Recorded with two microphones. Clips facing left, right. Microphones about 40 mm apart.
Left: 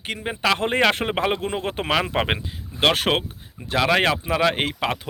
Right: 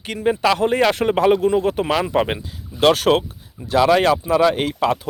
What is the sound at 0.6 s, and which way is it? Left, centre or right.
Speech, left.